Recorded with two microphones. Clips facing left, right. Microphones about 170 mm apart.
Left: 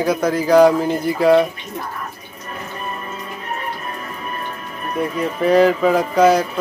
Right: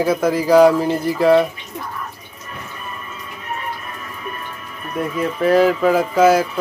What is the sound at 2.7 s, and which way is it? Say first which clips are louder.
Music: left 5 dB; 40° left (ahead or behind).